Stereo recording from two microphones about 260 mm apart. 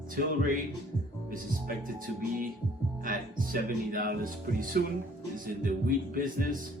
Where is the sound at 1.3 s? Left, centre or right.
Right.